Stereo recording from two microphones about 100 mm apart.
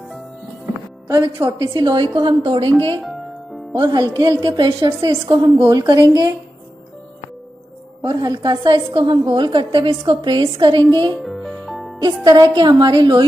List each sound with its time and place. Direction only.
1.2 s a woman's voice: 50° right (ahead or behind)
3.7 s a woman's voice: 45° right (ahead or behind)
8.0 s a woman's voice: 45° right (ahead or behind)
11.2 s music: centre (ahead or behind)
12.0 s speech: 35° right (ahead or behind)
12.5 s a woman's voice: 50° right (ahead or behind)